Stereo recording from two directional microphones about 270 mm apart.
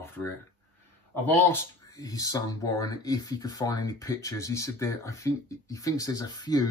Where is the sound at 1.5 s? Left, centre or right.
Centre.